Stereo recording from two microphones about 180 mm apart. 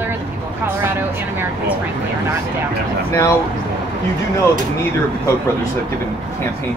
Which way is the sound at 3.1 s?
15° left (ahead or behind).